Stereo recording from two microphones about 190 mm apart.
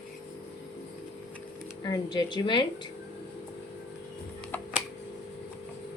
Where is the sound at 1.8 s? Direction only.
20° left (ahead or behind).